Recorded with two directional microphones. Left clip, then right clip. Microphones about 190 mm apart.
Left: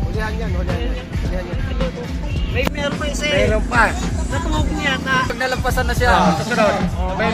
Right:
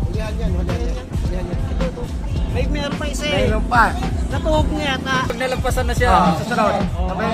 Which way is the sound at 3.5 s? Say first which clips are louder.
Even; 45° right (ahead or behind).